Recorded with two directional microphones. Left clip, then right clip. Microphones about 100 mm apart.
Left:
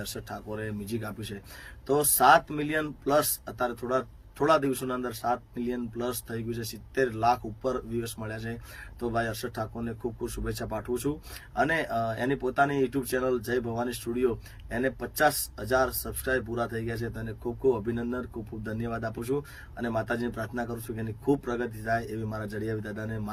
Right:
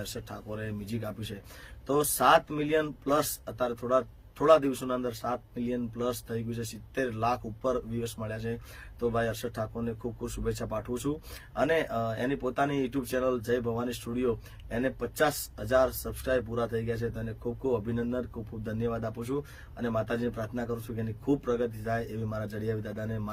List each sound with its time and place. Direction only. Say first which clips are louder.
0.0 s speech: left 2 dB; 35° right (ahead or behind)